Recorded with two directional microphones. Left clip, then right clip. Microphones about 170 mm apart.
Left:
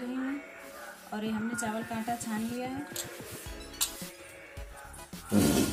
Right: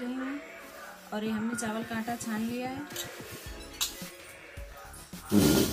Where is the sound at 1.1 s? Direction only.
Centre (ahead or behind).